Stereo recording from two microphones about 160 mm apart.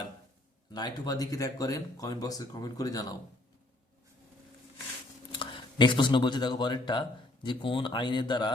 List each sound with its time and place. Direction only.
0.7 s speech: 25° left (ahead or behind)
5.3 s speech: 30° left (ahead or behind)